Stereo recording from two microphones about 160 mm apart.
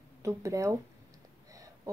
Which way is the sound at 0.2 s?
20° right (ahead or behind).